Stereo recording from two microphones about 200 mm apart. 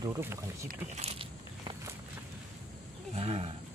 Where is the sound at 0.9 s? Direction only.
30° right (ahead or behind).